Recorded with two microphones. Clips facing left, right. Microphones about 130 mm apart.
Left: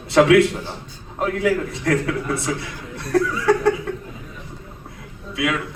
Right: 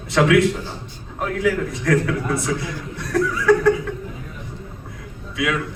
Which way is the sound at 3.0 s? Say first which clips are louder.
Left 2 dB; 30° left (ahead or behind).